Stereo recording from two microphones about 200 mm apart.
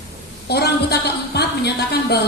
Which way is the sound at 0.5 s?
55° left (ahead or behind).